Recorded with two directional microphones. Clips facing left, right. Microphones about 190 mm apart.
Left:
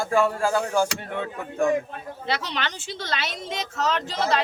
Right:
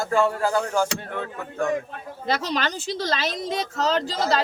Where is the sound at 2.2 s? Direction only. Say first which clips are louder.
Right 4 dB; 40° right (ahead or behind).